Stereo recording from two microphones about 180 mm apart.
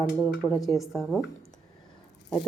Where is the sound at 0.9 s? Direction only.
Centre (ahead or behind).